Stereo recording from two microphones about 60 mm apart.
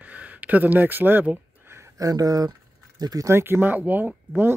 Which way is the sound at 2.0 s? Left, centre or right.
Right.